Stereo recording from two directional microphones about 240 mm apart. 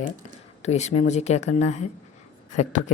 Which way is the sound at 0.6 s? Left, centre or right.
Left.